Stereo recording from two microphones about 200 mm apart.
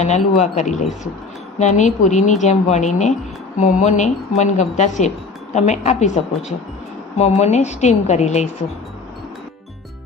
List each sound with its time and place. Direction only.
0.0 s a woman's voice: 35° left (ahead or behind)
7.2 s a woman's voice: 35° left (ahead or behind)